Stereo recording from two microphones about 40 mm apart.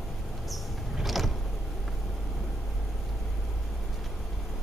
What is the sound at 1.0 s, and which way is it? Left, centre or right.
Vehicle, centre.